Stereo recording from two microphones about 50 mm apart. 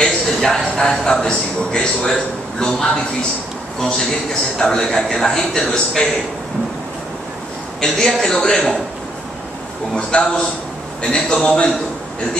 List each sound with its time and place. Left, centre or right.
0.0 s a sound: centre
0.8 s a man's voice: centre
7.8 s a man's voice: centre
10.1 s a man's voice: left